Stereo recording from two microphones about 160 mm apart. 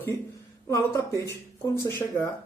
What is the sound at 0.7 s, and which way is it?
Speech, 20° left (ahead or behind).